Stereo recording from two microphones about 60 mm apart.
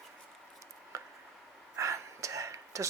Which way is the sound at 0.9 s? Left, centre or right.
Right.